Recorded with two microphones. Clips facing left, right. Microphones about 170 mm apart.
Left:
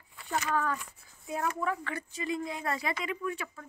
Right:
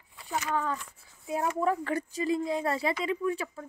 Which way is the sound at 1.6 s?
40° right (ahead or behind).